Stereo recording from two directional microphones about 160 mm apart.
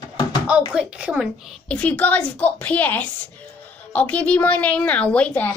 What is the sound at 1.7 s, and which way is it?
A woman's voice, 10° left (ahead or behind).